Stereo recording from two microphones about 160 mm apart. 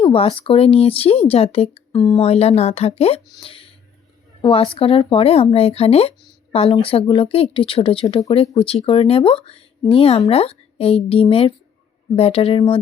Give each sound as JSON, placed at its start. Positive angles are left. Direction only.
{"t": 0.0, "sound": "speech", "side_deg": 35}